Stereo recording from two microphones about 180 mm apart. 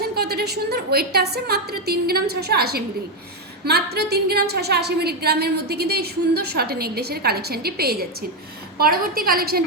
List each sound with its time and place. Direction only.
0.0 s a woman's voice: 60° right (ahead or behind)